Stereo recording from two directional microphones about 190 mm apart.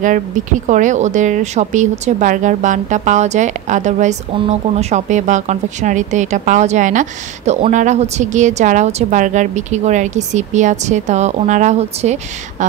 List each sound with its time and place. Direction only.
0.0 s speech: 40° right (ahead or behind)